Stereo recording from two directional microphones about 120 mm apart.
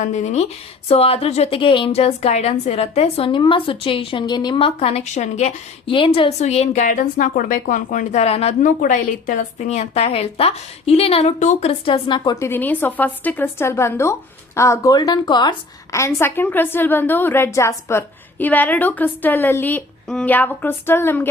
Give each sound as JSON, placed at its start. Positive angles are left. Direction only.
{"t": 0.0, "sound": "speech", "side_deg": 75}
{"t": 0.9, "sound": "a woman's voice", "side_deg": 55}
{"t": 5.8, "sound": "a woman's voice", "side_deg": 45}
{"t": 6.4, "sound": "a woman's voice", "side_deg": 70}
{"t": 12.4, "sound": "speech", "side_deg": 15}
{"t": 15.9, "sound": "a woman's voice", "side_deg": 25}